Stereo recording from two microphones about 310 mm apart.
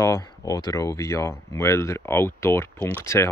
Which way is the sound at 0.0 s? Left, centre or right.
Centre.